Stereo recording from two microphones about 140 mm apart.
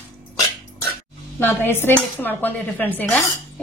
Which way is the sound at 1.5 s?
15° left (ahead or behind).